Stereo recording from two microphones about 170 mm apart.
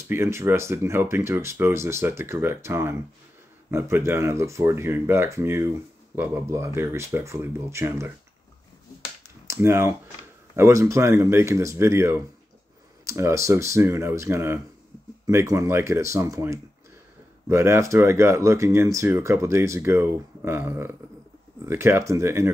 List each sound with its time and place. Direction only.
0.1 s speech: 15° right (ahead or behind)
9.5 s speech: 15° right (ahead or behind)